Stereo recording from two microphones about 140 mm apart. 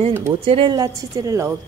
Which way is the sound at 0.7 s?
25° right (ahead or behind).